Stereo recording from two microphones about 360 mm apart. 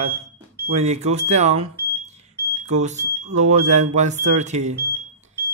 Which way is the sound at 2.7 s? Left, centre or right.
Centre.